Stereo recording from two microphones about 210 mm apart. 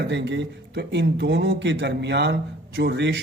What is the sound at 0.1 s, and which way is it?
Speech, 55° right (ahead or behind).